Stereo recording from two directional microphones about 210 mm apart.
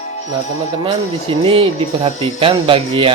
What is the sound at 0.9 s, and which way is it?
Speech, 25° right (ahead or behind).